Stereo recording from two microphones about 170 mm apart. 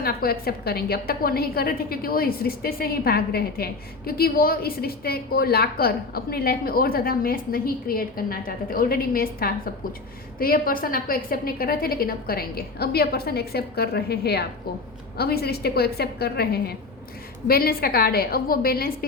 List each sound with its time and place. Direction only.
0.0 s a woman's voice: 65° left (ahead or behind)